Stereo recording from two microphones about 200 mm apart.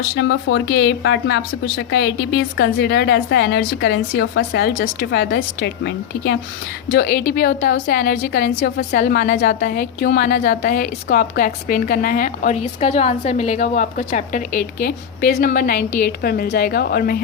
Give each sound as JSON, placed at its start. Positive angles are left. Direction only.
{"t": 0.2, "sound": "a woman's voice", "side_deg": 55}
{"t": 4.8, "sound": "a woman's voice", "side_deg": 50}
{"t": 6.9, "sound": "a woman's voice", "side_deg": 45}